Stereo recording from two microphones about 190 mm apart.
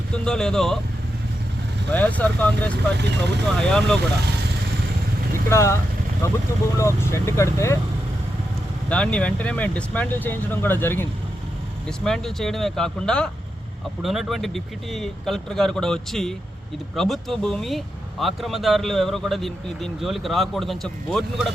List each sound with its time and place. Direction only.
0.3 s speech: 5° left (ahead or behind)
1.9 s speech: 10° left (ahead or behind)
3.0 s speech: 65° right (ahead or behind)
3.6 s speech: 5° left (ahead or behind)
5.5 s speech: 15° left (ahead or behind)
8.9 s speech: 5° left (ahead or behind)